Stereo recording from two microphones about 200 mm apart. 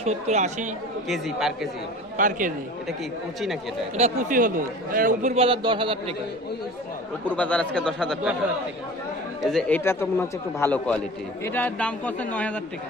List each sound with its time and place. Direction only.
0.0 s a man's voice: 35° right (ahead or behind)
1.0 s a man's voice: centre (ahead or behind)
2.1 s a man's voice: 40° right (ahead or behind)
3.9 s a man's voice: 35° right (ahead or behind)
7.3 s a man's voice: 5° left (ahead or behind)
9.4 s a man's voice: centre (ahead or behind)